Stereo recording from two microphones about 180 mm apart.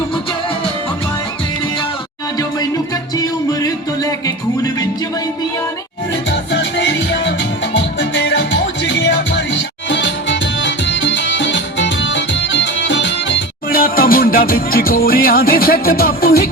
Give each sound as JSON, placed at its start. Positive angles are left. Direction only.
{"t": 2.4, "sound": "music", "side_deg": 20}
{"t": 6.5, "sound": "music", "side_deg": 80}
{"t": 13.7, "sound": "music", "side_deg": 55}